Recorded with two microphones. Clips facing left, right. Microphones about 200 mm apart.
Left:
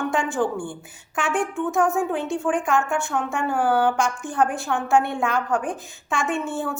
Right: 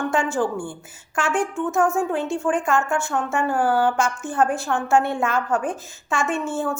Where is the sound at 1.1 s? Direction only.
Centre (ahead or behind).